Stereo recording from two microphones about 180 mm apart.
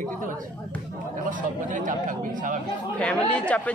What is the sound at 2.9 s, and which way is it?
Speech, 5° left (ahead or behind).